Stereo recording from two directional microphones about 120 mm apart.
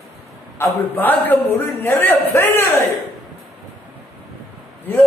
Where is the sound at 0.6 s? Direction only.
20° left (ahead or behind).